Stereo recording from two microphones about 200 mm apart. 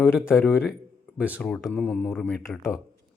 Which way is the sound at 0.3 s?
15° left (ahead or behind).